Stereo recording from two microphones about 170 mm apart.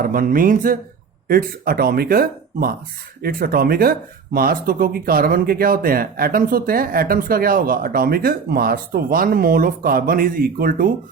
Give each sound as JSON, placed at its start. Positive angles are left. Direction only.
{"t": 0.0, "sound": "speech", "side_deg": -55}